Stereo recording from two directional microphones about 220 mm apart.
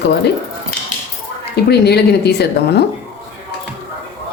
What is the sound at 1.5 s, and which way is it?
A woman's voice, 50° left (ahead or behind).